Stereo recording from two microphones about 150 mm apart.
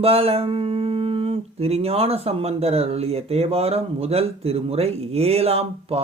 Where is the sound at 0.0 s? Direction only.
40° right (ahead or behind).